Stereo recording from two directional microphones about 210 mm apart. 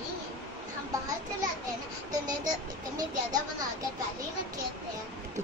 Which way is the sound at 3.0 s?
20° right (ahead or behind).